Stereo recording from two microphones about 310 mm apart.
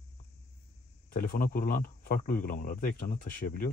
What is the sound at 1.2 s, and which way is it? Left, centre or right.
A man's voice, left.